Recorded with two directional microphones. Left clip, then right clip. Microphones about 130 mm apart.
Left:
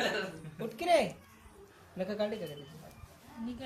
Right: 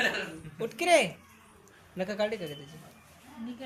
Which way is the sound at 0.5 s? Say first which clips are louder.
Right 4 dB; 65° right (ahead or behind).